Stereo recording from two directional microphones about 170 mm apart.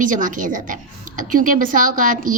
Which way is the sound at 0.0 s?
50° right (ahead or behind).